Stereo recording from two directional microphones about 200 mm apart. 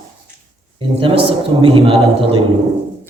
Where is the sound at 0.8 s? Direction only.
25° right (ahead or behind).